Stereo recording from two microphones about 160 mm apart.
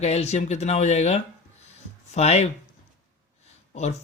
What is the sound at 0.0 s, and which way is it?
Speech, 45° left (ahead or behind).